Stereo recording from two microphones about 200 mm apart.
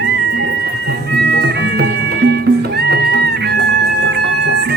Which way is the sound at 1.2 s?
55° right (ahead or behind).